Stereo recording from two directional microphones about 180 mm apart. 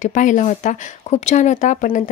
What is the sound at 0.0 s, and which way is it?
A woman's voice, 45° left (ahead or behind).